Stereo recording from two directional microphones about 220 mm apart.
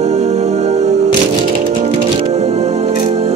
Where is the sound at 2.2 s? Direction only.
30° right (ahead or behind).